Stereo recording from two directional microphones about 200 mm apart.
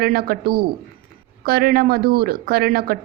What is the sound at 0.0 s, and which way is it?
A woman's voice, 50° right (ahead or behind).